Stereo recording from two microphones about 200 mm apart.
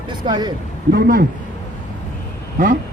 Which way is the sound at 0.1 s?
20° right (ahead or behind).